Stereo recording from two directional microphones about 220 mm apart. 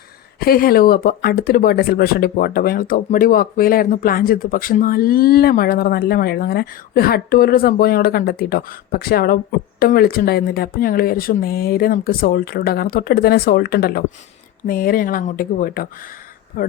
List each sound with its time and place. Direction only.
0.3 s speech: 40° left (ahead or behind)